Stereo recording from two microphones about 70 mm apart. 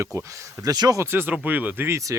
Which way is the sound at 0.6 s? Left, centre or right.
Right.